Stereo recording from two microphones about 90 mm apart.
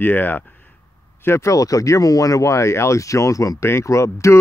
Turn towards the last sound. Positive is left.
turn(degrees=35)  # may be behind; listen again after turning